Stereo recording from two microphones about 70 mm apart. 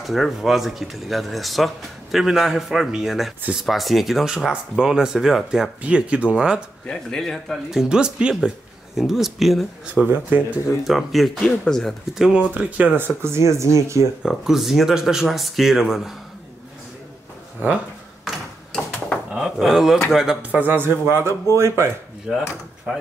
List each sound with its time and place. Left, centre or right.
0.0 s speech: centre
5.8 s speech: centre
6.9 s speech: centre
7.9 s speech: centre
10.0 s speech: right
10.8 s speech: centre
11.4 s speech: centre
11.8 s speech: centre
12.5 s speech: right
14.2 s speech: centre
18.3 s a sound: centre
20.1 s speech: centre
20.5 s speech: right
22.9 s speech: centre